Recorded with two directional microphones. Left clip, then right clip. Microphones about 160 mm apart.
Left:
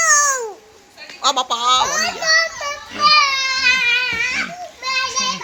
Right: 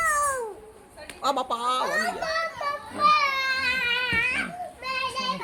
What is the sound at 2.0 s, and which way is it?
Children playing, 60° left (ahead or behind).